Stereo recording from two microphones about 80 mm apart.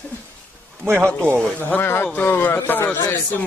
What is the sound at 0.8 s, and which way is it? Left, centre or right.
Speech, right.